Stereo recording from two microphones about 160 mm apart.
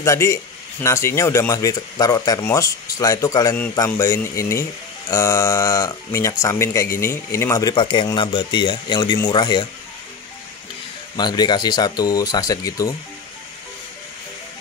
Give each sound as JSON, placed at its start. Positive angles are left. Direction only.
{"t": 0.0, "sound": "speech", "side_deg": 20}
{"t": 11.1, "sound": "speech", "side_deg": 25}